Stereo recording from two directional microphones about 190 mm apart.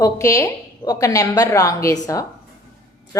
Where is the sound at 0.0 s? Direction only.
15° left (ahead or behind).